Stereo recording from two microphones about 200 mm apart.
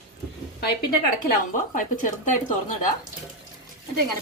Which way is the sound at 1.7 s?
40° left (ahead or behind).